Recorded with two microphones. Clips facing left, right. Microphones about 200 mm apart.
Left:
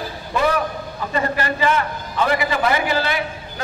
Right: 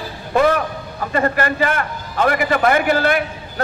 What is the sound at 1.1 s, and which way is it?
A man's voice, 50° right (ahead or behind).